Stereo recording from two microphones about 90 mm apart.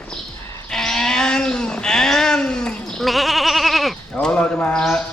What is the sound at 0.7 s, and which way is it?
Speech, 5° left (ahead or behind).